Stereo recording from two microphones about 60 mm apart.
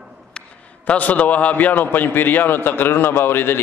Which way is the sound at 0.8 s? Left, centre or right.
Left.